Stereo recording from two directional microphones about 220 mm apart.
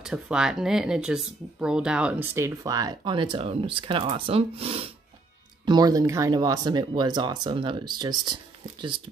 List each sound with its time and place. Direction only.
0.0 s speech: 5° right (ahead or behind); by 8.4 s 20° right (ahead or behind)